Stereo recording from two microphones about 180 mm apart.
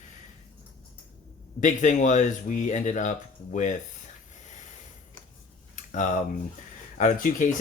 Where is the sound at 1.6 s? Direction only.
45° left (ahead or behind).